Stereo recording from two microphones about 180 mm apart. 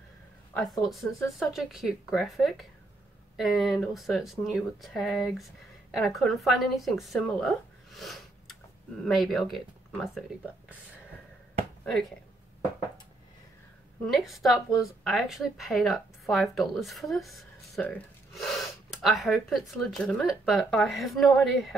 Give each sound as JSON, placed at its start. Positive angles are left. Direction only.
{"t": 0.6, "sound": "speech", "side_deg": 0}
{"t": 11.8, "sound": "speech", "side_deg": 0}
{"t": 14.0, "sound": "speech", "side_deg": 0}
{"t": 17.8, "sound": "gasp", "side_deg": 5}
{"t": 19.0, "sound": "speech", "side_deg": 0}